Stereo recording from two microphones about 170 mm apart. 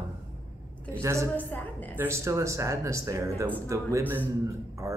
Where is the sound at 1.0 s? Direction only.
15° right (ahead or behind).